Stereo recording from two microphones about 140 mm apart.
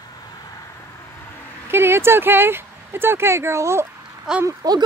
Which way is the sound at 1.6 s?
15° right (ahead or behind).